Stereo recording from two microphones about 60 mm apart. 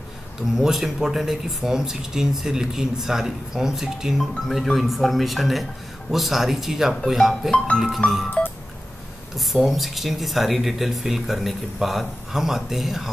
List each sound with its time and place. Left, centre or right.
0.4 s speech: centre
7.5 s speech: centre
8.0 s music: left
9.5 s speech: centre